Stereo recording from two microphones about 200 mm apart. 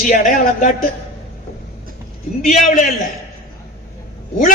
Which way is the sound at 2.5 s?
35° left (ahead or behind).